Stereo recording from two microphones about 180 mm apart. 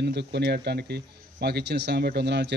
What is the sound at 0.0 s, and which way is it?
Speech, 70° right (ahead or behind).